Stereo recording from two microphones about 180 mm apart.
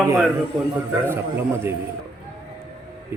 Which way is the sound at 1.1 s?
15° right (ahead or behind).